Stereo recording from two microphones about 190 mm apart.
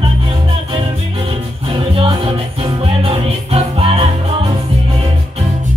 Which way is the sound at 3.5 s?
30° right (ahead or behind).